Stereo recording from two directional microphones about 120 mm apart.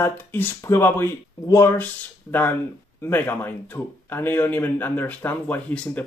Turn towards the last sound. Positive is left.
turn(degrees=15)  # may be behind; listen again after turning